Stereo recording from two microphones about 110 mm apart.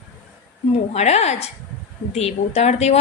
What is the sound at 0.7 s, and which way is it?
Speech, 80° left.